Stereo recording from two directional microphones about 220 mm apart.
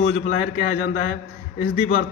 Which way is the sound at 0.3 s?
35° left (ahead or behind).